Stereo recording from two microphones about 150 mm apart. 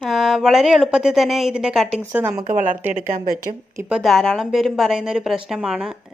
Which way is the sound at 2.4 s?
60° right (ahead or behind).